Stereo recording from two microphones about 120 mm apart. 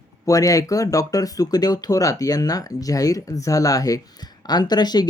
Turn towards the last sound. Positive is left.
turn(degrees=35)  # may be behind; listen again after turning